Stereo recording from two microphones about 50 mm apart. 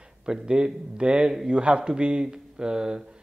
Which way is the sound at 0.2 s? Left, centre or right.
Centre.